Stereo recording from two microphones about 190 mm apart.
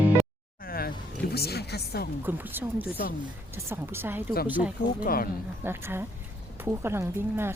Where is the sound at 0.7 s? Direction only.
50° left (ahead or behind).